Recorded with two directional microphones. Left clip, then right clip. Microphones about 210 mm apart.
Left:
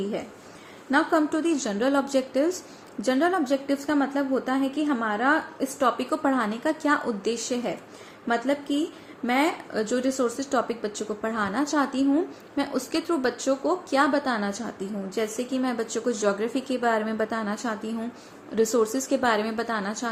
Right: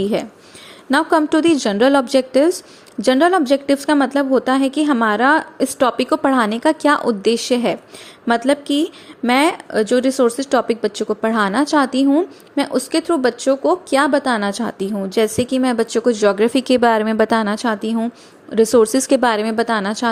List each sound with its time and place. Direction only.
0.9 s a woman's voice: 50° right (ahead or behind)